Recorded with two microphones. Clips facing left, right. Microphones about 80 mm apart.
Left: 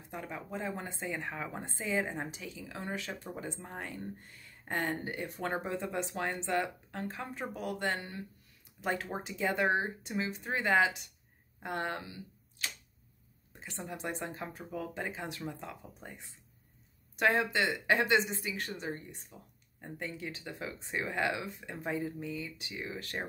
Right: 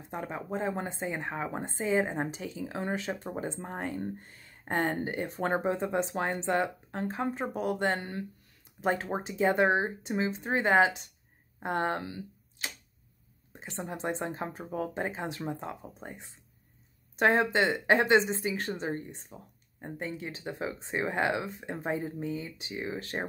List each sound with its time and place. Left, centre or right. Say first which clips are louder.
0.1 s speech: right 5 dB; right
12.6 s tick-tock: right 1 dB; right
13.5 s speech: right 4 dB; right